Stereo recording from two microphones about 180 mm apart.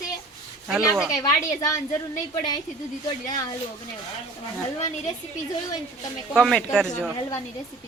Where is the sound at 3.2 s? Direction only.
20° left (ahead or behind).